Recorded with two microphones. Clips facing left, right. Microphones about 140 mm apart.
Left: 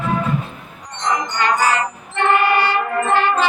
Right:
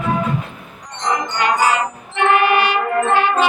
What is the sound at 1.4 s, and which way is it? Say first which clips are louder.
Music: right 1 dB; 15° right (ahead or behind).